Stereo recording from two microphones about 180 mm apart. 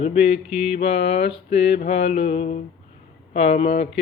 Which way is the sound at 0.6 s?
35° left (ahead or behind).